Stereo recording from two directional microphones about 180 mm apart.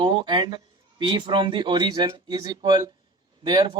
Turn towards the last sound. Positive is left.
turn(degrees=-25)  # may be behind; listen again after turning